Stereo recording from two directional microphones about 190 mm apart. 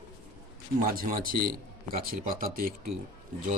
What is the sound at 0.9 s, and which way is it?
Speech, 50° right (ahead or behind).